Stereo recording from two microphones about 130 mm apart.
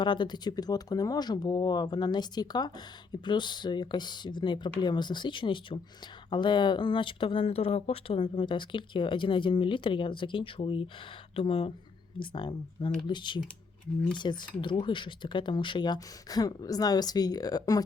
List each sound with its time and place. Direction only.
0.0 s speech: 35° left (ahead or behind)
12.2 s speech: 35° left (ahead or behind)